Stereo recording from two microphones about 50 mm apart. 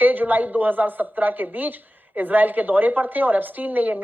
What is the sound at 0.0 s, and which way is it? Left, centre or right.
A woman's voice, right.